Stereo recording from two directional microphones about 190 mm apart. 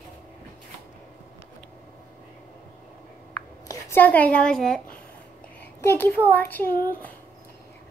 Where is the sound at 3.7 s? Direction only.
10° left (ahead or behind).